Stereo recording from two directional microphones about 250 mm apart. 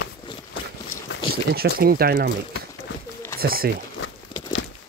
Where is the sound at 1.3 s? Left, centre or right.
Right.